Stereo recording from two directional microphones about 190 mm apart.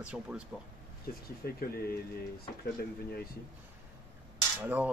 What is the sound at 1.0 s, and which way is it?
Speech, 55° left (ahead or behind).